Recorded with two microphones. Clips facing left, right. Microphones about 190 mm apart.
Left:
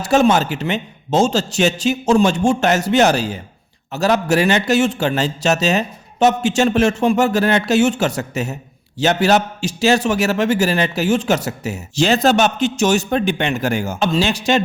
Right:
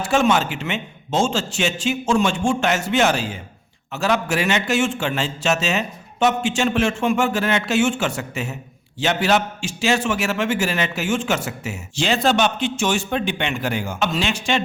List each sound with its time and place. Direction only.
0.0 s a man's voice: 40° left (ahead or behind)